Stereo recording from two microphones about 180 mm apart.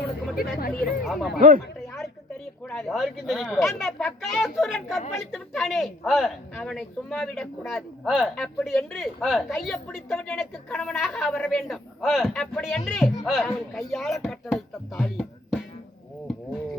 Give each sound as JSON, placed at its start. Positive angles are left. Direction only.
{"t": 0.3, "sound": "speech", "side_deg": 55}
{"t": 0.9, "sound": "speech", "side_deg": 0}
{"t": 1.4, "sound": "speech", "side_deg": -50}
{"t": 2.6, "sound": "speech", "side_deg": 5}